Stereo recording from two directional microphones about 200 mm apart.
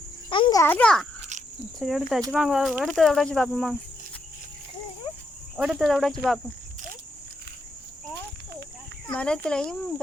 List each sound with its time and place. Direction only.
0.3 s a child's voice: 25° left (ahead or behind)
0.6 s a child's voice: 10° left (ahead or behind)
5.5 s speech: centre (ahead or behind)
9.0 s speech: 5° left (ahead or behind)